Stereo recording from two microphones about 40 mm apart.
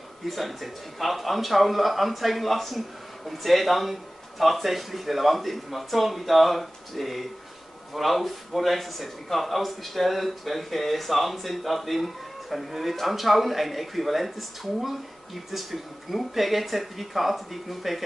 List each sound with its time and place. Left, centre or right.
0.3 s speech: centre